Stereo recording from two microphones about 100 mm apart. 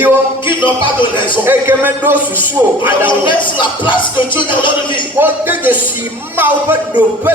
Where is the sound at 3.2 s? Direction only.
55° left (ahead or behind).